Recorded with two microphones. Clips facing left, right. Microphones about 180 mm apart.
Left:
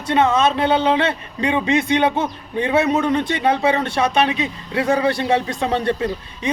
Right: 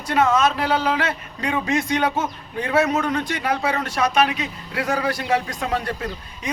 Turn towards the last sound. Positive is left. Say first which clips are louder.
# left 7 dB
turn(degrees=25)  # may be behind; listen again after turning